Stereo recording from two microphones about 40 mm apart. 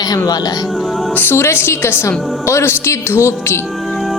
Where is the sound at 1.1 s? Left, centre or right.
Left.